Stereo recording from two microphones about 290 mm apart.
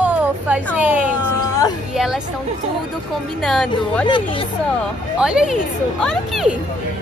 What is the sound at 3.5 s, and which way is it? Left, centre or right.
Speech, centre.